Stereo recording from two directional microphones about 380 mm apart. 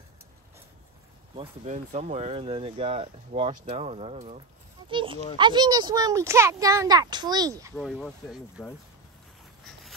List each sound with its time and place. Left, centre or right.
1.3 s a child's voice: centre